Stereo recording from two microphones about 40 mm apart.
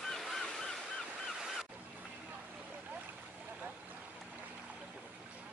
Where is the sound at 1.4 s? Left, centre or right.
Centre.